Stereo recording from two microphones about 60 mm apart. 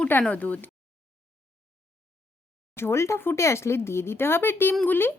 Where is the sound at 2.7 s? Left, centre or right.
Left.